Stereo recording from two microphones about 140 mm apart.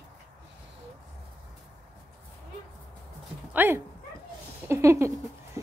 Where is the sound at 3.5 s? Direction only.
15° right (ahead or behind).